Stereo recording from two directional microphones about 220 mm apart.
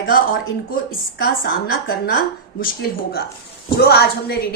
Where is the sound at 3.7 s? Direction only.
45° left (ahead or behind).